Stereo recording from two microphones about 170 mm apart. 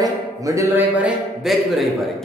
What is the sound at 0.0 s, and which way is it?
Speech, 20° right (ahead or behind).